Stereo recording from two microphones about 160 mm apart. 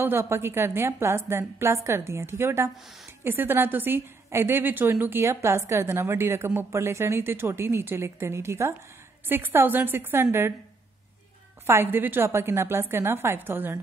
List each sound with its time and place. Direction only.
0.0 s a woman's voice: 15° right (ahead or behind)
11.6 s a woman's voice: 15° right (ahead or behind)